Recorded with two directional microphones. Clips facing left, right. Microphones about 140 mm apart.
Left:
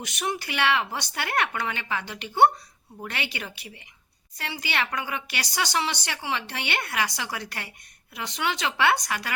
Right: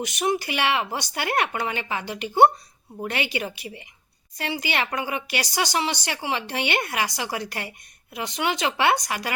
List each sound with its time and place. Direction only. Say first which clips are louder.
0.0 s a woman's voice: right 6 dB; 15° right (ahead or behind)